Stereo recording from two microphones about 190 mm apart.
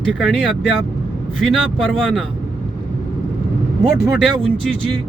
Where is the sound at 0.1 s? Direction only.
Centre (ahead or behind).